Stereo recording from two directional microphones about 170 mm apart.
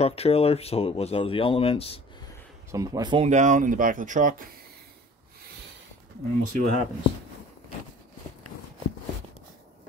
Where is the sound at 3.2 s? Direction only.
45° right (ahead or behind).